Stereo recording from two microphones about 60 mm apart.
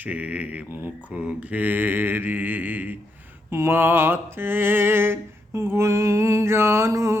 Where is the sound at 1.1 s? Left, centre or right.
Right.